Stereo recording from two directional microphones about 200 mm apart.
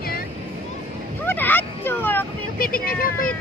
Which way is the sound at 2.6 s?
45° left (ahead or behind).